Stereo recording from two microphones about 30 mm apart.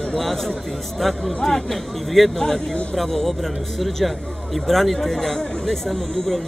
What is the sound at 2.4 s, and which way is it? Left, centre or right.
A man's voice, centre.